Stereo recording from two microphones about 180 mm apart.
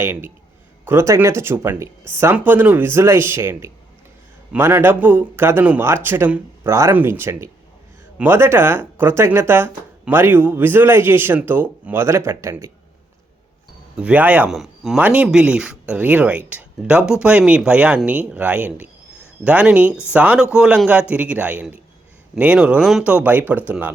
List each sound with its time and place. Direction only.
0.0 s speech: 10° right (ahead or behind)
13.9 s speech: 5° right (ahead or behind)